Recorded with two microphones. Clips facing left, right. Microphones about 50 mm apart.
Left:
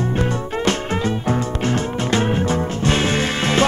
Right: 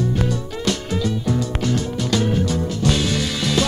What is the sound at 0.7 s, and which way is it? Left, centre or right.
Music, left.